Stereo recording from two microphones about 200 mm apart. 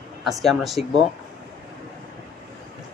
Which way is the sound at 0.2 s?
Centre (ahead or behind).